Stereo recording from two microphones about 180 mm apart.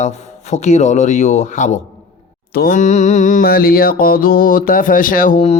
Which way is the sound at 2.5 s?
50° left (ahead or behind).